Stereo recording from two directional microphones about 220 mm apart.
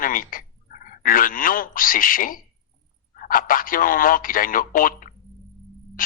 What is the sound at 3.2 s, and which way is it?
Speech, 40° left (ahead or behind).